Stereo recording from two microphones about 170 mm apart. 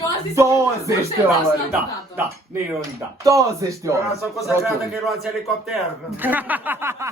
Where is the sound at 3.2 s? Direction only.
20° right (ahead or behind).